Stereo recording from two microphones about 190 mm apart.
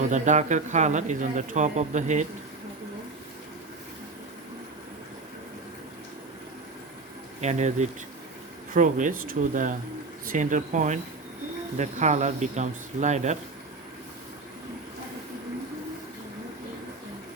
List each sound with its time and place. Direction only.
0.0 s speech: 40° right (ahead or behind)
7.4 s speech: 40° right (ahead or behind)